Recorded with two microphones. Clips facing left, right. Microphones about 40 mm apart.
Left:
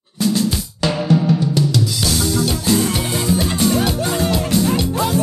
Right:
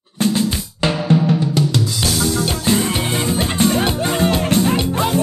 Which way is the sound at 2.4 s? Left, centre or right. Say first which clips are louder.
Even; right.